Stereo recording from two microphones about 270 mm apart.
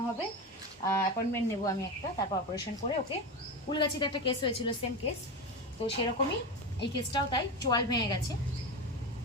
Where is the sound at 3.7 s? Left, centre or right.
Centre.